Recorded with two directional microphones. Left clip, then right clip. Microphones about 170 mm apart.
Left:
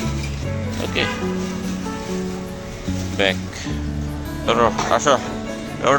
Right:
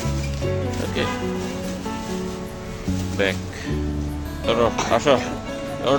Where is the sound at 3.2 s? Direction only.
15° right (ahead or behind).